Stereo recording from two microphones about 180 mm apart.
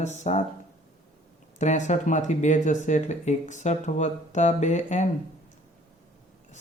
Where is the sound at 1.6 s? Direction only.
40° left (ahead or behind).